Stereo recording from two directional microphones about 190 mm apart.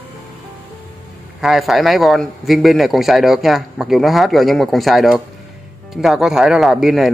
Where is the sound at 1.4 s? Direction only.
Centre (ahead or behind).